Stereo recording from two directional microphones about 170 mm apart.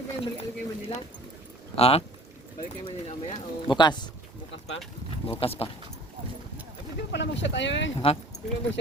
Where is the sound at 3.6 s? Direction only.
25° left (ahead or behind).